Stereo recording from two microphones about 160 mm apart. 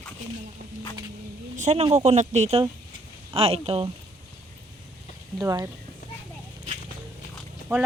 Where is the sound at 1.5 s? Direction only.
45° right (ahead or behind).